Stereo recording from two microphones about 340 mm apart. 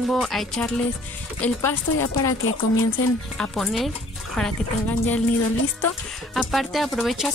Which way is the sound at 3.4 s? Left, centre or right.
Centre.